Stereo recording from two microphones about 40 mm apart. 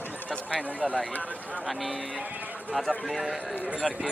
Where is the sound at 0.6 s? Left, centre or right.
Right.